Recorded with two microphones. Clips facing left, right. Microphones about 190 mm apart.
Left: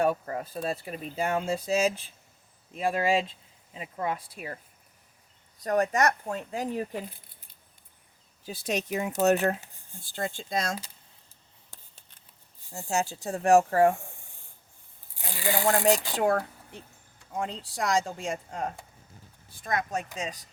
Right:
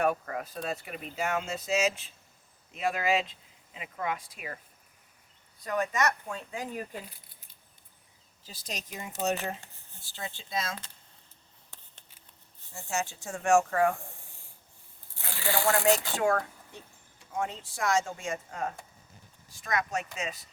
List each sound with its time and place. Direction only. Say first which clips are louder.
0.0 s speech: left 2 dB; 30° left (ahead or behind)
6.7 s speech: left 6 dB; 15° left (ahead or behind)
8.4 s speech: left 11 dB; 60° left (ahead or behind)
10.0 s speech: left 8 dB; 50° left (ahead or behind)
12.7 s speech: left 4 dB; 35° left (ahead or behind)
15.2 s speech: left 2 dB; 15° left (ahead or behind)
17.3 s speech: left 1 dB; 35° left (ahead or behind)